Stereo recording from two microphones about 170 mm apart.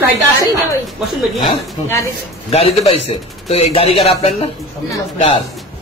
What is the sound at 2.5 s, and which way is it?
A man's voice, 35° left (ahead or behind).